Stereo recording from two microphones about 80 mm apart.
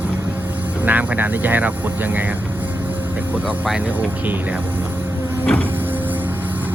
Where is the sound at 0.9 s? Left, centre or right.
Right.